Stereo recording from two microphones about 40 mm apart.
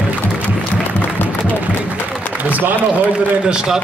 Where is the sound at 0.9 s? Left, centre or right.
Left.